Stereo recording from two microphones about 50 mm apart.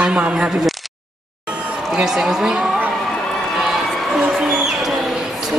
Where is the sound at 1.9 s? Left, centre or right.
Centre.